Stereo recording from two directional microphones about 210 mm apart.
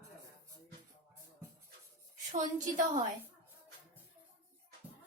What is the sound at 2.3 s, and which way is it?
Speech, 35° right (ahead or behind).